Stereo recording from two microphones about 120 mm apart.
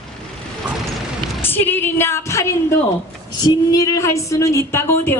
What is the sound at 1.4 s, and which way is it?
A woman's voice, 15° left (ahead or behind).